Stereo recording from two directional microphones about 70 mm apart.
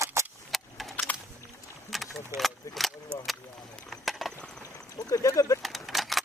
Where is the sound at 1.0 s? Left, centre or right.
Left.